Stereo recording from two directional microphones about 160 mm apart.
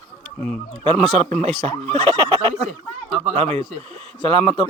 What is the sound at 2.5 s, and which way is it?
Speech, 45° right (ahead or behind).